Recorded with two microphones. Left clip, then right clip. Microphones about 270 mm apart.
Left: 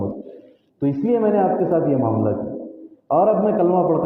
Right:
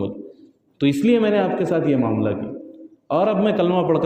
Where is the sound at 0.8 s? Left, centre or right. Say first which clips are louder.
Right 1 dB; right.